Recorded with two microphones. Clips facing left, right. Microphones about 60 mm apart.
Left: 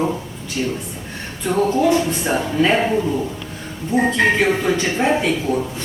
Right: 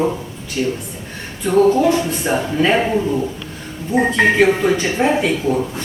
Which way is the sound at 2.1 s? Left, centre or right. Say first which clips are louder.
Right 1 dB; centre.